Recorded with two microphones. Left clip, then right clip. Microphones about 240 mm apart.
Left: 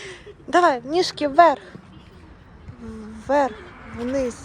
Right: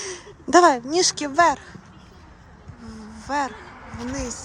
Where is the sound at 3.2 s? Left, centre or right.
Centre.